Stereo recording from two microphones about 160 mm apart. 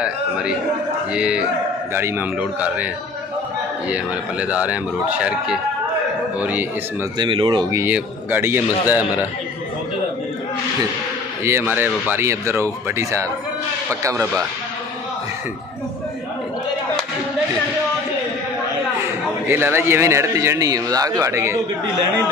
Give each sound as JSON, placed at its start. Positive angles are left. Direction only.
{"t": 0.0, "sound": "speech", "side_deg": -5}
{"t": 3.9, "sound": "speech", "side_deg": -10}
{"t": 7.2, "sound": "speech", "side_deg": -30}
{"t": 7.8, "sound": "speech", "side_deg": -15}
{"t": 11.4, "sound": "speech", "side_deg": -15}
{"t": 19.4, "sound": "speech", "side_deg": -15}